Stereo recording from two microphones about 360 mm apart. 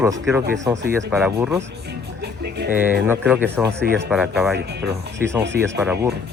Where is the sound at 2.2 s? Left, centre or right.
Right.